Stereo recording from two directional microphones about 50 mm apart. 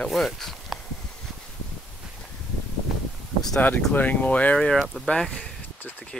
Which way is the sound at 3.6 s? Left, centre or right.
Left.